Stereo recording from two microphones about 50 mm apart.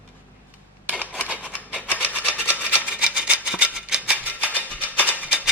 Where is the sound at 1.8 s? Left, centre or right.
Left.